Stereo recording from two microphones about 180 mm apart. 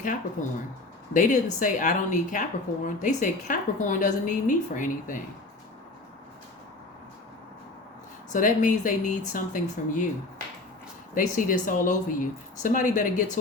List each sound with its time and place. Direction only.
0.4 s speech: 45° left (ahead or behind)
8.3 s speech: 45° left (ahead or behind)
11.1 s speech: 50° left (ahead or behind)